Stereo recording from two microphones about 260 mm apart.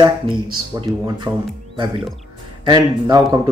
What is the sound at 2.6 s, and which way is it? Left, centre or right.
Speech, centre.